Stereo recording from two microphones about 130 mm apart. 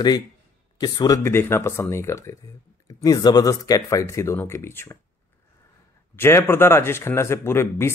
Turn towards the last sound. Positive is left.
turn(degrees=20)  # may be behind; listen again after turning